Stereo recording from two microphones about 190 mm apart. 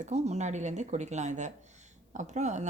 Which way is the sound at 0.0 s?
35° right (ahead or behind).